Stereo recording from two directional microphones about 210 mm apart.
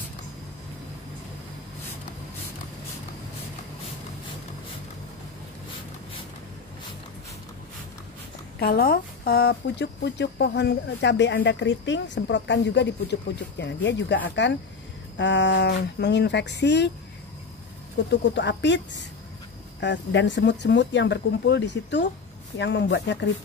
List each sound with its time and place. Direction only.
8.5 s speech: 50° left (ahead or behind)
18.0 s speech: 55° left (ahead or behind)
19.8 s speech: 60° left (ahead or behind)